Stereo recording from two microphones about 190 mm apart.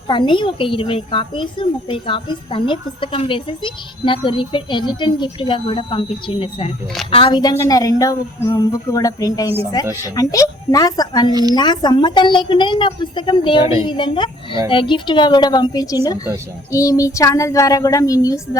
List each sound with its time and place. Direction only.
0.1 s a woman's voice: 25° left (ahead or behind)